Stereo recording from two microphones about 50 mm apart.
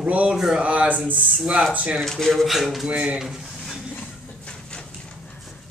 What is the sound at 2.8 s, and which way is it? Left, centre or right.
Speech, right.